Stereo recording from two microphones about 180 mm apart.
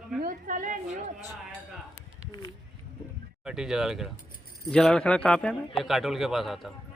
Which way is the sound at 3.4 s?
5° right (ahead or behind).